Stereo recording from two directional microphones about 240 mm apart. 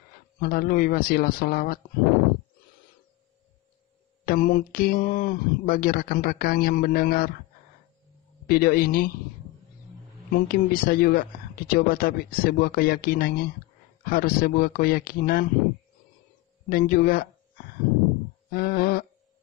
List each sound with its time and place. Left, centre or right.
0.4 s speech: left
4.3 s speech: left
8.5 s speech: left
10.3 s speech: left
16.6 s speech: left
18.5 s speech: left